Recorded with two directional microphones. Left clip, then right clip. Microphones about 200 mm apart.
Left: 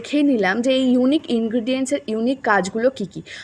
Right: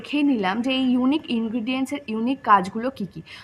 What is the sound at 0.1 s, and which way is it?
A woman's voice, 15° left (ahead or behind).